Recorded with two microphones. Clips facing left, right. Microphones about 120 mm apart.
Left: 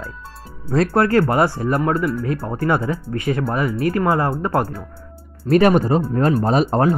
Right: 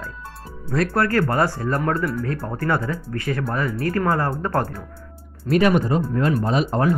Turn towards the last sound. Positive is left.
turn(degrees=35)  # may be behind; listen again after turning